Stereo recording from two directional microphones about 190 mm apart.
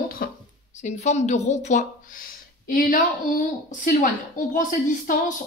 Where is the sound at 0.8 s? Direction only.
35° left (ahead or behind).